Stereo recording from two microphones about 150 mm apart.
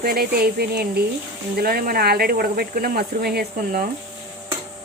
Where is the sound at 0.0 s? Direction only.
90° right.